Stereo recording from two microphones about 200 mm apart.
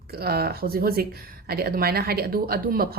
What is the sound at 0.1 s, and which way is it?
A woman's voice, 50° right (ahead or behind).